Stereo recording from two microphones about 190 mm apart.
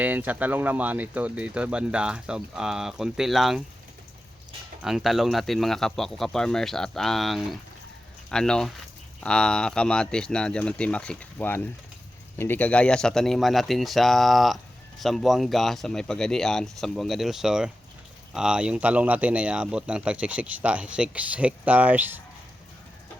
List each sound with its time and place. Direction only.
0.0 s speech: 10° right (ahead or behind)
4.8 s speech: centre (ahead or behind)